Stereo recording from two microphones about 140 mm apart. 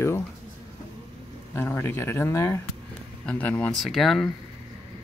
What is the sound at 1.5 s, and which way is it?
Speech, 15° left (ahead or behind).